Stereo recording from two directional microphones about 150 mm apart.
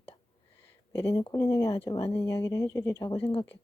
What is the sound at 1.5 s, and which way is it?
Speech, 20° left (ahead or behind).